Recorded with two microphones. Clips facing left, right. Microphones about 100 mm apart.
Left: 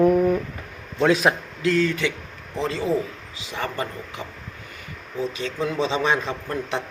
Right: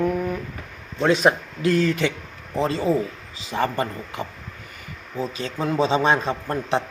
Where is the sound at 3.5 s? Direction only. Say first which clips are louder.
Right 5 dB; 40° right (ahead or behind).